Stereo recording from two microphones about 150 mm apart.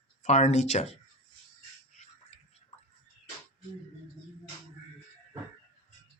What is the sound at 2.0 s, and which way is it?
Music, 50° left (ahead or behind).